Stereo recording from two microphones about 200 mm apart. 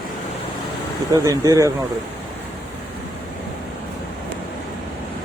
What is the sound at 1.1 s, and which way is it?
Speech, 15° right (ahead or behind).